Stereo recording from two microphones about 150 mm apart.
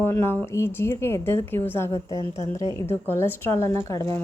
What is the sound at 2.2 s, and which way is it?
Speech, 50° left (ahead or behind).